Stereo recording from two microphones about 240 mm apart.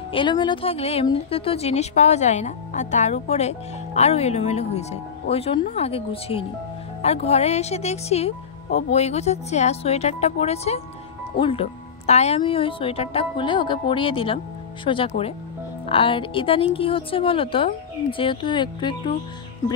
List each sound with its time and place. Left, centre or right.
0.1 s speech: centre